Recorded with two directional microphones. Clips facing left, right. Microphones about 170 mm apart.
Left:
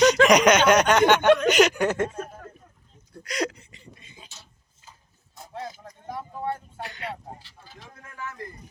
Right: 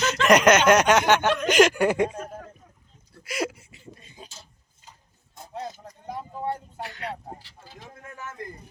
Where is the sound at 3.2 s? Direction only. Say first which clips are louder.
Left 1 dB; 5° right (ahead or behind).